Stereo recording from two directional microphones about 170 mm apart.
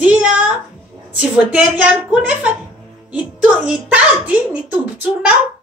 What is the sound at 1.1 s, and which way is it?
A woman's voice, 10° right (ahead or behind).